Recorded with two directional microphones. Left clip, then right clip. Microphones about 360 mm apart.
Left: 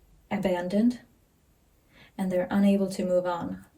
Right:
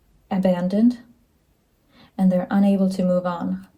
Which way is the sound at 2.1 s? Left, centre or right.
Centre.